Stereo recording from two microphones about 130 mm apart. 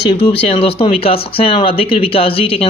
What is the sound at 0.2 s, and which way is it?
Speech, 45° left (ahead or behind).